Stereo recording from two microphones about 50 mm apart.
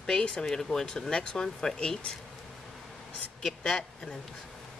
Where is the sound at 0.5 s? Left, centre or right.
Centre.